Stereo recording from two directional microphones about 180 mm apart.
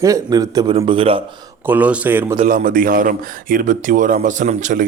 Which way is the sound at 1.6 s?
10° right (ahead or behind).